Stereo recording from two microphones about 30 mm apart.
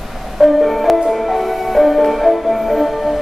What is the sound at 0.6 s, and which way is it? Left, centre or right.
Music, centre.